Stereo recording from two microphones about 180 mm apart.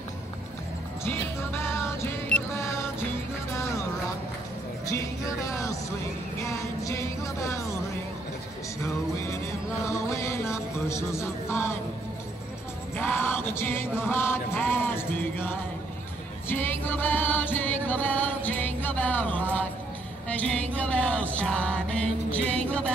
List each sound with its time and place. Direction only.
1.0 s music: 15° left (ahead or behind)
4.8 s music: 20° left (ahead or behind)
9.8 s music: 15° left (ahead or behind)
12.9 s music: 10° left (ahead or behind)